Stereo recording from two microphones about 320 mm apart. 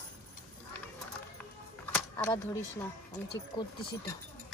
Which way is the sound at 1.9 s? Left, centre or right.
Centre.